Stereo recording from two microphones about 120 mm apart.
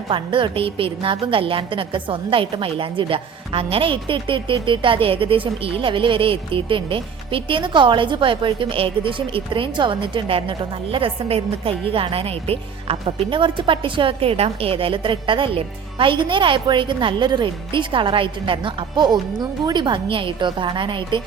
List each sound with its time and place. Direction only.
0.1 s a woman's voice: 45° right (ahead or behind)